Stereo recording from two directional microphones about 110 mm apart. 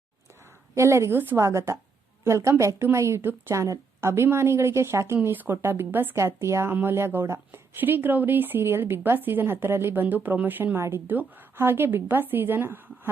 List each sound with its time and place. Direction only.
0.7 s a woman's voice: 25° right (ahead or behind)